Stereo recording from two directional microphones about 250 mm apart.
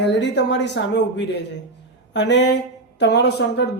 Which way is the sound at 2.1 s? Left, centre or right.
Left.